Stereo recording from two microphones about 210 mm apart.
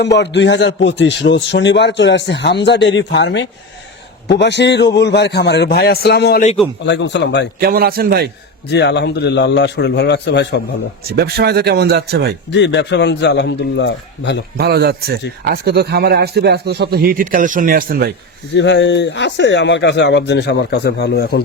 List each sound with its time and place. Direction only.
0.0 s a man's voice: 55° left (ahead or behind)
7.6 s speech: 45° right (ahead or behind)
8.7 s a man's voice: 55° left (ahead or behind)
11.1 s speech: 50° right (ahead or behind)
12.5 s a man's voice: 55° left (ahead or behind)
14.6 s speech: 50° right (ahead or behind)
18.5 s a man's voice: 55° left (ahead or behind)